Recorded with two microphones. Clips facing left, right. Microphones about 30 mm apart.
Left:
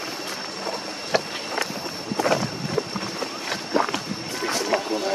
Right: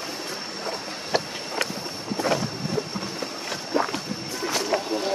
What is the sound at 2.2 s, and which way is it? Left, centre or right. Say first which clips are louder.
Walk: left 3 dB; left.